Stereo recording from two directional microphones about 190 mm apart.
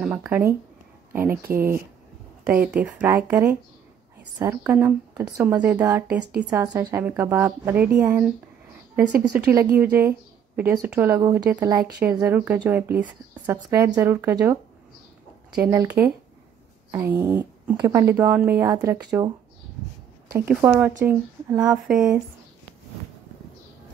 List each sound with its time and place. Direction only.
0.0 s speech: 5° right (ahead or behind)
15.6 s speech: 15° right (ahead or behind)